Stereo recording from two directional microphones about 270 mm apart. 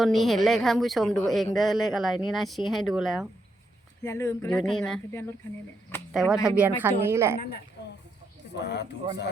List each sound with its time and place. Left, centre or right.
0.0 s speech: centre
4.0 s a woman's voice: centre
8.5 s speech: left